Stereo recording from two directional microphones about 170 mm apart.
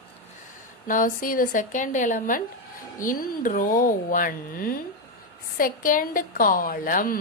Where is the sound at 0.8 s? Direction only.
50° left (ahead or behind).